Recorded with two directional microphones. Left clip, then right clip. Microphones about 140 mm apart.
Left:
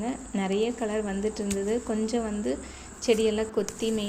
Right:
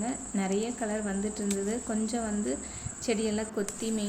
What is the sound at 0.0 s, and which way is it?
Speech, 15° left (ahead or behind).